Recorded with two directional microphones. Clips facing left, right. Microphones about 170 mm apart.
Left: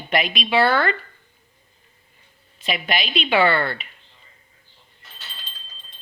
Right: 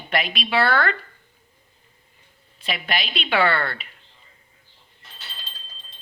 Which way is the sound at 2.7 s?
Centre (ahead or behind).